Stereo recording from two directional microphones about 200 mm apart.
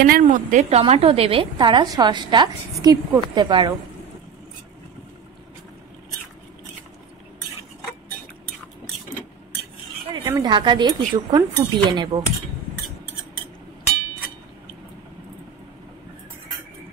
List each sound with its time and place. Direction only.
0.0 s a woman's voice: 45° right (ahead or behind); by 3.7 s 20° right (ahead or behind)
10.2 s a woman's voice: 20° right (ahead or behind)